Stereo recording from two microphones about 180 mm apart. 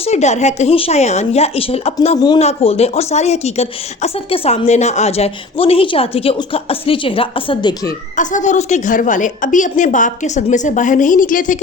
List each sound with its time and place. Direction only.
0.0 s speech: 40° left (ahead or behind)
2.4 s speech: 35° left (ahead or behind)
8.1 s a woman's voice: 45° left (ahead or behind)